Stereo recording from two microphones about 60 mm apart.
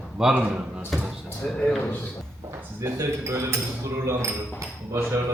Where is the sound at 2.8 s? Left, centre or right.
Right.